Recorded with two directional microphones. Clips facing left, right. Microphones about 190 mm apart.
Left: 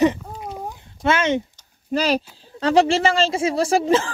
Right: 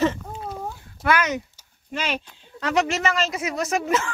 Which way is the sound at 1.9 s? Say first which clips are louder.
Left 8 dB; 35° left (ahead or behind).